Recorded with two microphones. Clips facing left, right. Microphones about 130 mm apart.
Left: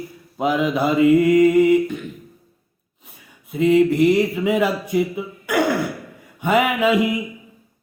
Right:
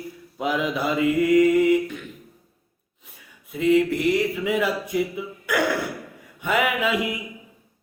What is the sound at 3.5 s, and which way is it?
Mantra, 25° left (ahead or behind).